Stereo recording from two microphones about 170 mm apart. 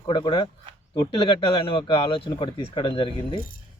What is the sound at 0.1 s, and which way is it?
Speech, 30° left (ahead or behind).